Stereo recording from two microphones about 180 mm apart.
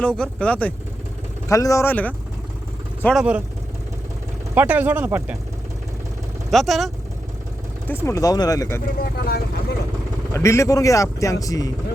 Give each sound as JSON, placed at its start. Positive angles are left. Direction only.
{"t": 0.0, "sound": "a man's voice", "side_deg": 5}
{"t": 1.5, "sound": "a man's voice", "side_deg": 20}
{"t": 4.5, "sound": "speech", "side_deg": -10}
{"t": 6.5, "sound": "speech", "side_deg": 0}
{"t": 7.9, "sound": "a man's voice", "side_deg": 15}
{"t": 9.1, "sound": "speech", "side_deg": 60}
{"t": 10.3, "sound": "a man's voice", "side_deg": 15}